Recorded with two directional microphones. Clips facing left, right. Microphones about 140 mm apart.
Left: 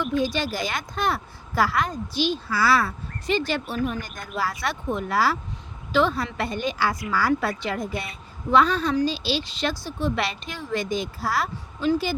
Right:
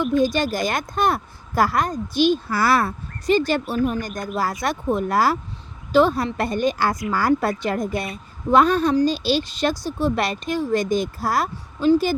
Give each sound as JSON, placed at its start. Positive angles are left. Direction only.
{"t": 0.2, "sound": "speech", "side_deg": -45}